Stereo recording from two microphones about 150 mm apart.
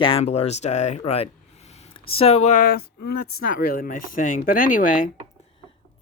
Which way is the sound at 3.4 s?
70° left (ahead or behind).